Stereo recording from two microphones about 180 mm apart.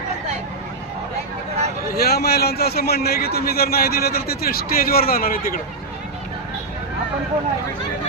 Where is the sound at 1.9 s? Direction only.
60° left (ahead or behind).